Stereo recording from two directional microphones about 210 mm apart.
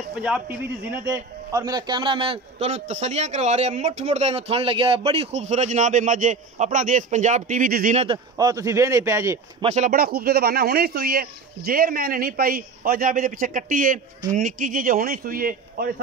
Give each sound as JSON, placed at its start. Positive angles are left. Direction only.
{"t": 0.1, "sound": "a man's voice", "side_deg": -5}
{"t": 8.0, "sound": "speech", "side_deg": -20}
{"t": 9.6, "sound": "a man's voice", "side_deg": -30}
{"t": 9.8, "sound": "speech", "side_deg": -45}